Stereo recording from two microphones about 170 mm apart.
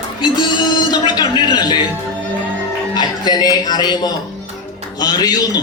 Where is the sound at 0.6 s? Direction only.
25° left (ahead or behind).